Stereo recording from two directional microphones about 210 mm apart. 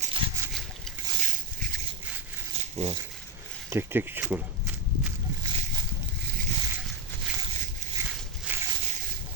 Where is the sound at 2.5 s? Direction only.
30° right (ahead or behind).